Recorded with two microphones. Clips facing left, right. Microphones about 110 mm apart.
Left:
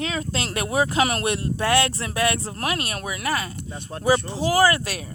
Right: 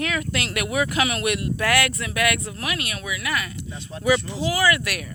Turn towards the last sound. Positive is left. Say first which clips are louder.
# left 2 dB
turn(degrees=30)  # may be behind; listen again after turning